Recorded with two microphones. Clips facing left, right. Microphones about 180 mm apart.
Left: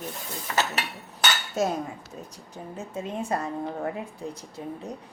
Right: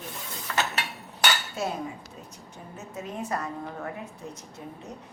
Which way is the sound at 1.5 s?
45° left (ahead or behind).